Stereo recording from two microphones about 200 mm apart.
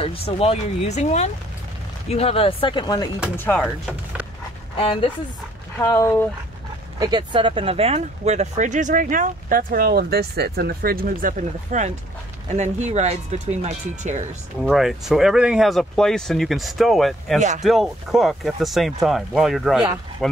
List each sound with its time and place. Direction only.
0.0 s speech: 30° left (ahead or behind)
3.3 s speech: 10° left (ahead or behind)
4.7 s speech: 25° left (ahead or behind)
5.8 s speech: 10° left (ahead or behind)
7.0 s speech: 20° right (ahead or behind)
14.6 s speech: centre (ahead or behind)